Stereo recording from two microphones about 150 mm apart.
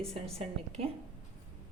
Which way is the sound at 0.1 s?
45° right (ahead or behind).